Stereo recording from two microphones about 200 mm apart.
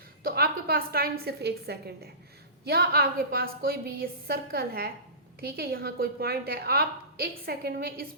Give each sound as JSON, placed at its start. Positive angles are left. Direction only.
{"t": 0.2, "sound": "a woman's voice", "side_deg": -50}